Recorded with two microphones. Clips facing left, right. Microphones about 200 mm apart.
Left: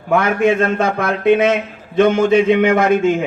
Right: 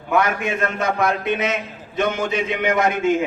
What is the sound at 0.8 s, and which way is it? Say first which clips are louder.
A man's voice: left 3 dB; 55° left (ahead or behind).